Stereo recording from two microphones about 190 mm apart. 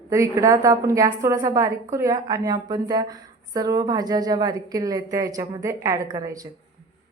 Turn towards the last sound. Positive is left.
turn(degrees=-20)  # may be behind; listen again after turning